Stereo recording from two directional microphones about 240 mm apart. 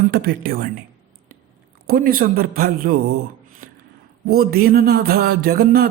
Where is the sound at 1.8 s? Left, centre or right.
Right.